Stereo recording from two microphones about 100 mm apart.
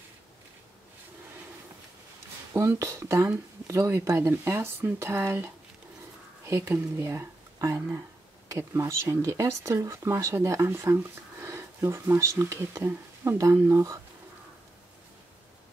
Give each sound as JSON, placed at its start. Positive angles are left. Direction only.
{"t": 2.5, "sound": "speech", "side_deg": -30}